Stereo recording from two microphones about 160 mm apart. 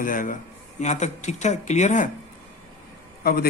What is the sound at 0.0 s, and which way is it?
Speech, 60° left (ahead or behind).